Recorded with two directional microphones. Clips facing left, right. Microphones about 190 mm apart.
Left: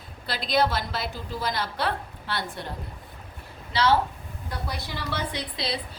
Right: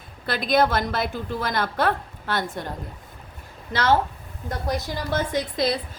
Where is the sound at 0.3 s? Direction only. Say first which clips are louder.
Right 4 dB; 50° right (ahead or behind).